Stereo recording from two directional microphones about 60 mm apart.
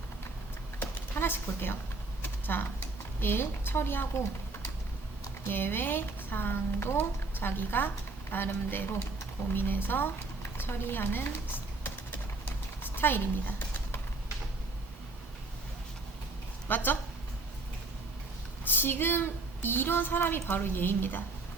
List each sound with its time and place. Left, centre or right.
0.8 s a sound: left
2.2 s speech: left
5.5 s a woman's voice: left
9.5 s a sound: left
16.6 s a woman's voice: left
18.6 s a woman's voice: left